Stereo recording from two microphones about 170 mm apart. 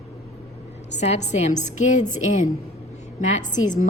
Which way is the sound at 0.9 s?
40° left (ahead or behind).